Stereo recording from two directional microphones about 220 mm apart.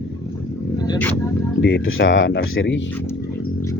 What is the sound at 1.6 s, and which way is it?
Speech, 60° left (ahead or behind).